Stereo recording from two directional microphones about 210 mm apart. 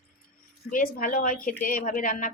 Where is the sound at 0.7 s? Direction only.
40° left (ahead or behind).